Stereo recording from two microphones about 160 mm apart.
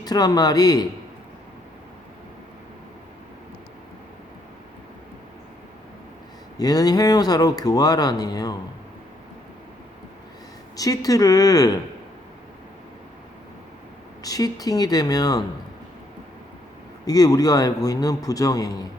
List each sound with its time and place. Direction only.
0.0 s speech: 25° left (ahead or behind)
6.6 s speech: 25° left (ahead or behind)
10.8 s speech: 20° left (ahead or behind)
14.2 s speech: 25° left (ahead or behind)
17.1 s speech: 25° left (ahead or behind)